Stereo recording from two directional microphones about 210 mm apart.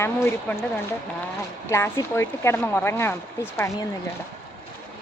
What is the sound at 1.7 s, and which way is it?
A woman's voice, 15° left (ahead or behind).